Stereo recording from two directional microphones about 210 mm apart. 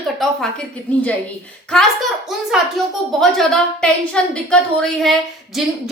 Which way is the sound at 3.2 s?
Centre (ahead or behind).